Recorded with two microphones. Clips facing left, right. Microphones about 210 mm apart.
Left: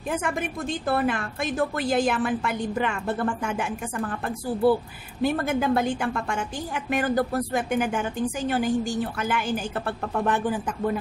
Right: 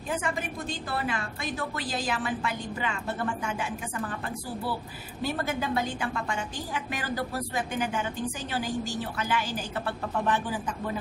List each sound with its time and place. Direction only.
0.8 s a woman's voice: 55° left (ahead or behind)
5.2 s a woman's voice: 55° left (ahead or behind)